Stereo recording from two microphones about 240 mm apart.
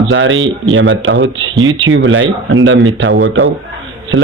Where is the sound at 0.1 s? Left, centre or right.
Right.